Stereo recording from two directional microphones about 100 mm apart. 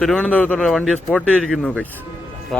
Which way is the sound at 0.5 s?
Centre (ahead or behind).